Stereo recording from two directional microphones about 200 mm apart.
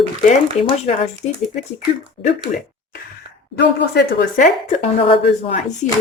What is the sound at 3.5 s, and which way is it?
Speech, 55° left (ahead or behind).